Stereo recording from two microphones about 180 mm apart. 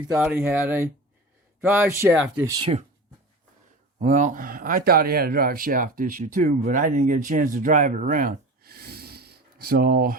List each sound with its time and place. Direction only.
0.1 s speech: 10° right (ahead or behind)
3.9 s speech: 45° right (ahead or behind)